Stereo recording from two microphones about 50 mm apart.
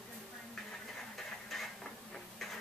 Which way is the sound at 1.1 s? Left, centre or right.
Centre.